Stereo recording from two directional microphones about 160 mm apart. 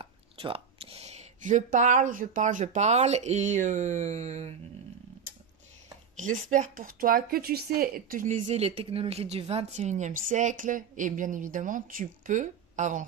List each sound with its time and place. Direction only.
0.0 s speech: 35° right (ahead or behind)
6.1 s speech: 50° right (ahead or behind)